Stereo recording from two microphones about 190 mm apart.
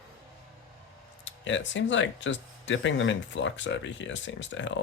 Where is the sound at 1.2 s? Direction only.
75° left (ahead or behind).